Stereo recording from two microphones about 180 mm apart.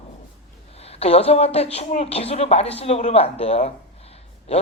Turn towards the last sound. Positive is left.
turn(degrees=35)  # may be behind; listen again after turning